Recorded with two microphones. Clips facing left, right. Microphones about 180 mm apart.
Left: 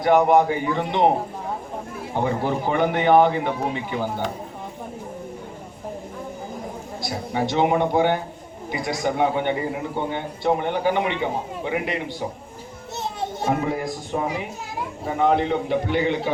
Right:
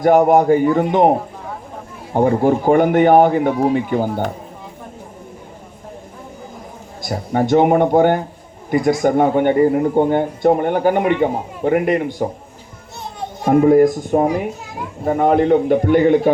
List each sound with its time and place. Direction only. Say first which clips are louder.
0.0 s a man's voice: right 5 dB; 45° right (ahead or behind)
2.1 s a man's voice: right 9 dB; 45° right (ahead or behind)
7.0 s a man's voice: right 6 dB; 50° right (ahead or behind)
13.7 s a man's voice: right 15 dB; 50° right (ahead or behind)